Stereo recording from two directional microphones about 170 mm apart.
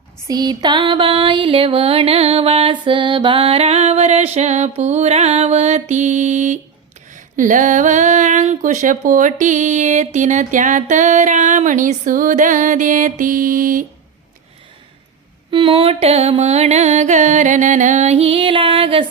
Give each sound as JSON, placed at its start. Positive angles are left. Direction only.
{"t": 0.3, "sound": "music", "side_deg": -25}
{"t": 7.1, "sound": "a sound", "side_deg": -50}
{"t": 15.4, "sound": "music", "side_deg": -30}